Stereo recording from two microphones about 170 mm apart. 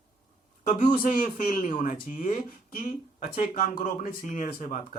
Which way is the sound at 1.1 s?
55° left (ahead or behind).